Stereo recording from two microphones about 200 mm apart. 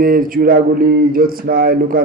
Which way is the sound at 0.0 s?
45° right (ahead or behind).